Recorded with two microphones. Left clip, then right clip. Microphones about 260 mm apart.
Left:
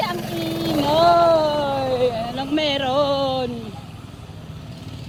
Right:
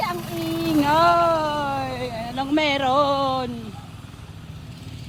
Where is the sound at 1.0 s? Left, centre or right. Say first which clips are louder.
Left 3 dB; right.